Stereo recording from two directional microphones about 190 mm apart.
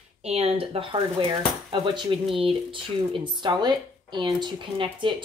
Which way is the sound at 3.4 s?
25° right (ahead or behind).